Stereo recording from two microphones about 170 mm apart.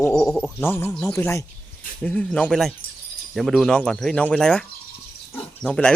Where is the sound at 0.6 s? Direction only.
15° left (ahead or behind).